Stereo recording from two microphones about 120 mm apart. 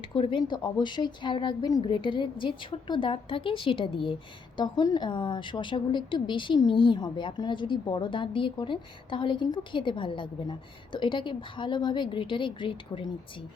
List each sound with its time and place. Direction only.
0.1 s a woman's voice: 40° left (ahead or behind)